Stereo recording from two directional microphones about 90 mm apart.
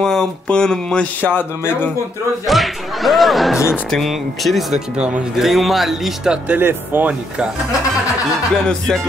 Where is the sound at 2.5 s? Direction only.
Centre (ahead or behind).